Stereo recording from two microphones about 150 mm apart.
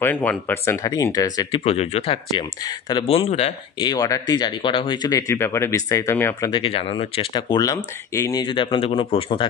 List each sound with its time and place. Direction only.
0.0 s speech: 10° left (ahead or behind)
1.6 s a man's voice: 40° left (ahead or behind)
3.8 s speech: 25° left (ahead or behind)
6.5 s speech: 40° left (ahead or behind); by 8.5 s 20° left (ahead or behind)
8.5 s a man's voice: 35° left (ahead or behind)